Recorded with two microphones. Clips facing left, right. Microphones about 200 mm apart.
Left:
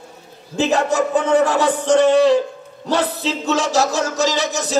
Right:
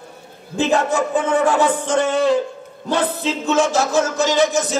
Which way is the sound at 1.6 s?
55° right (ahead or behind).